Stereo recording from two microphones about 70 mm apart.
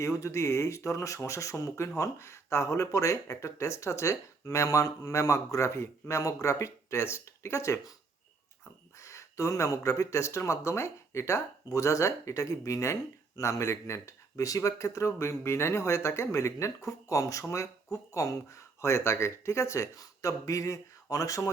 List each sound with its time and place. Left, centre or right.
0.0 s speech: left
9.0 s speech: left